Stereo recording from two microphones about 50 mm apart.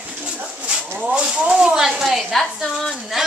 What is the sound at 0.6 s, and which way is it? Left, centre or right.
Speech, centre.